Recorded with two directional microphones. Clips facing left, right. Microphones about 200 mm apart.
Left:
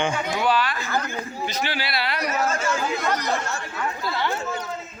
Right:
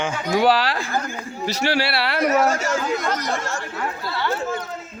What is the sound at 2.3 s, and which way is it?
Speech, 80° right.